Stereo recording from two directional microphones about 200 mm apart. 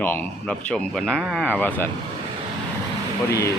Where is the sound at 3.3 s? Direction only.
15° left (ahead or behind).